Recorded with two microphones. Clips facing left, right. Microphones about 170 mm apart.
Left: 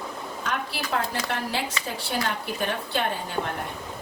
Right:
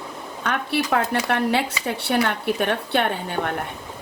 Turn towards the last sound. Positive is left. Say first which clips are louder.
# right 4 dB
turn(degrees=-65)  # may be behind; listen again after turning